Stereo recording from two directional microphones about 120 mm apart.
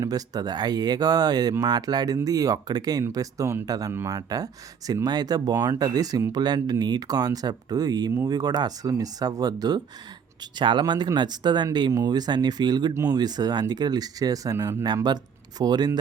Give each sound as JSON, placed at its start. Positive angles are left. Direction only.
{"t": 0.0, "sound": "speech", "side_deg": -35}
{"t": 15.0, "sound": "speech", "side_deg": -35}